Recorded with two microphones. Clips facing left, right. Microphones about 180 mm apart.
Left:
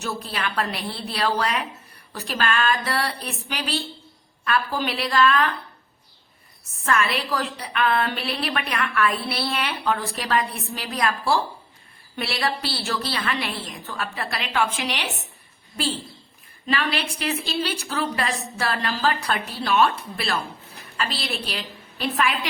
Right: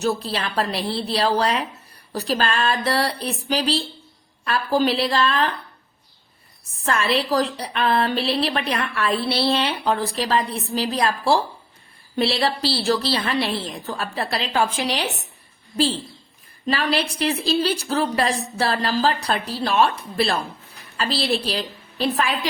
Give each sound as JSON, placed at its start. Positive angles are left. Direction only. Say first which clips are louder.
{"t": 0.0, "sound": "a woman's voice", "louder": "right 5 dB", "side_deg": -35}
{"t": 6.8, "sound": "a woman's voice", "louder": "right 2 dB", "side_deg": -30}
{"t": 16.6, "sound": "a woman's voice", "louder": "right 3 dB", "side_deg": -35}